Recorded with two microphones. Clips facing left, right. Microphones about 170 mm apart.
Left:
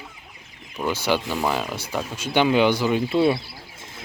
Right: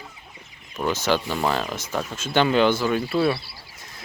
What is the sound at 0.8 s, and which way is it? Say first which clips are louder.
Speech: even; 10° left (ahead or behind).